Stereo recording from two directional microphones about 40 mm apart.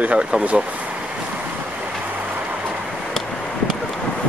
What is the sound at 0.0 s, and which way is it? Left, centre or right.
Speech, right.